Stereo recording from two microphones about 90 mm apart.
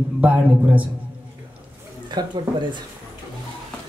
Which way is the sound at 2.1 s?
55° right (ahead or behind).